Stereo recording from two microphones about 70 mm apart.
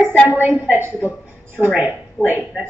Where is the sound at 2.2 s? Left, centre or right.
Right.